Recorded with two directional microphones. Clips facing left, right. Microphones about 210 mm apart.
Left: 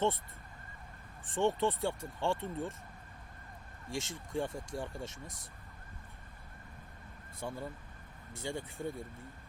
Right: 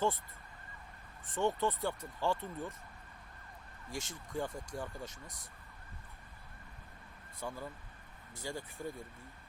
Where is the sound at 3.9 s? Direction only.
25° left (ahead or behind).